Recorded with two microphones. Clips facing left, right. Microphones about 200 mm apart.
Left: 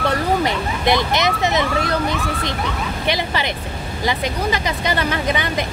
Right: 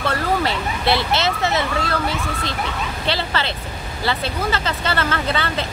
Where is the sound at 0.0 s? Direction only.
15° left (ahead or behind).